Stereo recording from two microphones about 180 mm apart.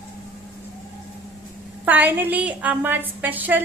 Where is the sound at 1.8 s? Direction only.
10° right (ahead or behind).